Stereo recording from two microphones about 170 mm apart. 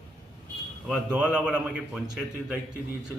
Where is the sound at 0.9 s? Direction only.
5° right (ahead or behind).